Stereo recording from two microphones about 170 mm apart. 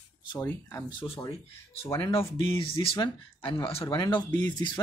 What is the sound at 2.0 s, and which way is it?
Speech, 30° left (ahead or behind).